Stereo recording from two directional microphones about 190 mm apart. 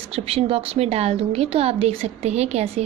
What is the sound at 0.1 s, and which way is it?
Speech, 30° right (ahead or behind).